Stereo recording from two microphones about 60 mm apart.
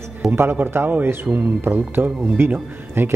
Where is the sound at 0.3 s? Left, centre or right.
Right.